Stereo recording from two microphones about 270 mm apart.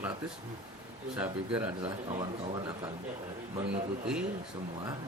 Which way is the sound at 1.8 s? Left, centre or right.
Centre.